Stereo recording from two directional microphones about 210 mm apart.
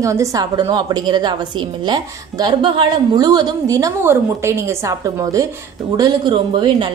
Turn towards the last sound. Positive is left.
turn(degrees=-25)  # may be behind; listen again after turning